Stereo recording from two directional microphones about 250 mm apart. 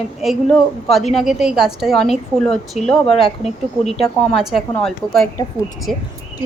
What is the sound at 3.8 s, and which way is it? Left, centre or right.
Speech, left.